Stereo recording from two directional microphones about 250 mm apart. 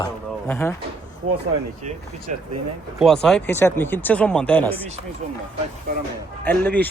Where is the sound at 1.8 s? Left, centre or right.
Right.